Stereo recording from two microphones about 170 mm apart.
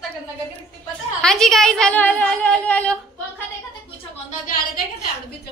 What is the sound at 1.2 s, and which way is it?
A woman's voice, centre (ahead or behind).